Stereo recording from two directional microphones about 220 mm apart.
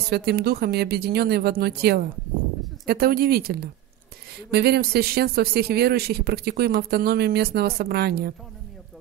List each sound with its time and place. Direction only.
0.1 s speech: 45° right (ahead or behind)